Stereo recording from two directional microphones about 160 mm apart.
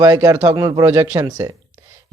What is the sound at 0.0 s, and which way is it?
A man's voice, 20° right (ahead or behind).